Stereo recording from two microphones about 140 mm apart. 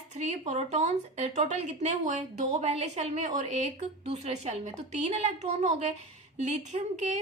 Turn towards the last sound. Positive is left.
turn(degrees=-55)  # may be behind; listen again after turning